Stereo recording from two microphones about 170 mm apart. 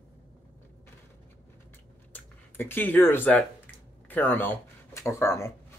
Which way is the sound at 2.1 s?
10° left (ahead or behind).